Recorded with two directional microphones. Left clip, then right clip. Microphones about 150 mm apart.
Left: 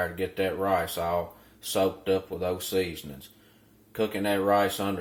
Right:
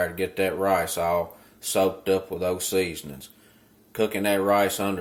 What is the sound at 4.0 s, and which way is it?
Speech, 15° right (ahead or behind).